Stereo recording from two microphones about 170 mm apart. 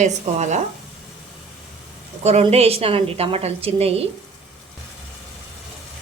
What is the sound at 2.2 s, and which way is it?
A woman's voice, 40° right (ahead or behind).